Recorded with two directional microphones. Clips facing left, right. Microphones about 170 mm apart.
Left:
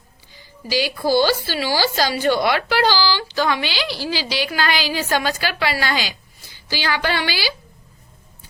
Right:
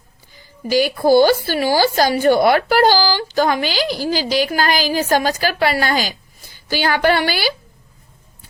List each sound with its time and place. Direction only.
0.7 s speech: 50° right (ahead or behind)